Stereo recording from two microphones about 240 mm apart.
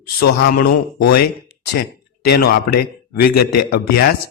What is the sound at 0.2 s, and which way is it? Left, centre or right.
A man's voice, left.